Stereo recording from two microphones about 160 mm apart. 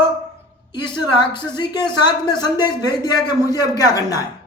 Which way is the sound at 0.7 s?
30° left (ahead or behind).